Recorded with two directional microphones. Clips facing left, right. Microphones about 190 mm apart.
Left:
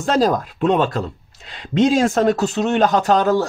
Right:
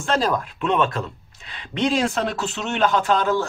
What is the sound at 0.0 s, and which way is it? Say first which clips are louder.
Speech: left 5 dB; 40° left (ahead or behind).